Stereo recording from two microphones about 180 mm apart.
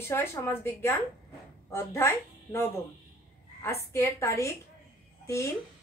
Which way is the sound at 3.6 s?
15° left (ahead or behind).